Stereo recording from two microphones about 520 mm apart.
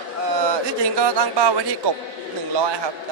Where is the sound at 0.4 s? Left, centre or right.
Right.